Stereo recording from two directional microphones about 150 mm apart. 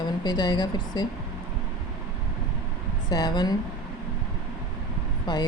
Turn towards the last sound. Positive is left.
turn(degrees=30)  # may be behind; listen again after turning